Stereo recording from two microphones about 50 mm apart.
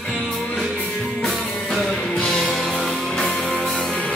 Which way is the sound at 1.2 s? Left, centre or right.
Centre.